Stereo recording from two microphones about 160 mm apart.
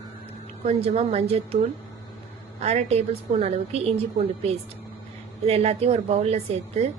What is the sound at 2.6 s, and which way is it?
A woman's voice, 40° right (ahead or behind).